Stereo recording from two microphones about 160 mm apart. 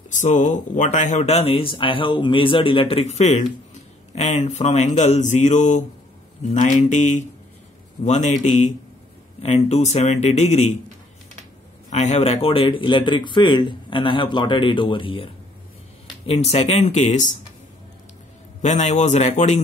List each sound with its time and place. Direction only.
0.1 s a man's voice: 50° left (ahead or behind)
11.9 s speech: 45° left (ahead or behind)
18.6 s speech: 45° left (ahead or behind)